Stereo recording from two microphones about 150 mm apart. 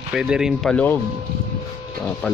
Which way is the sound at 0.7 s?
10° left (ahead or behind).